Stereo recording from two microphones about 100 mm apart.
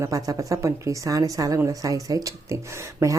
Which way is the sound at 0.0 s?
35° right (ahead or behind).